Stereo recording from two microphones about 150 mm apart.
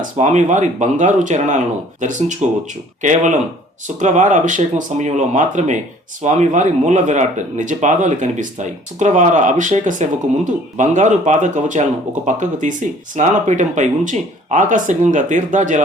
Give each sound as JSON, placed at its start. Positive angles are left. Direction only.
{"t": 0.2, "sound": "speech", "side_deg": -55}